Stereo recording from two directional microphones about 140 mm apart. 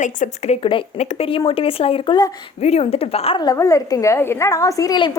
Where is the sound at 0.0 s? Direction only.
55° left (ahead or behind).